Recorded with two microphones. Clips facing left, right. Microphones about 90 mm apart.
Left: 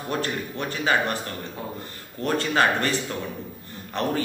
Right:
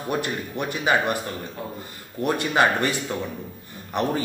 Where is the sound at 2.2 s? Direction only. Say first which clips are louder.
Right 1 dB; 15° right (ahead or behind).